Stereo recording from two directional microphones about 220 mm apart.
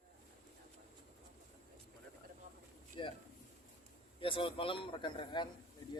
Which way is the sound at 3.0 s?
20° left (ahead or behind).